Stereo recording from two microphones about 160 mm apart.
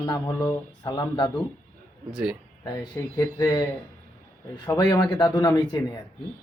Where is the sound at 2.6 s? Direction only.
20° left (ahead or behind).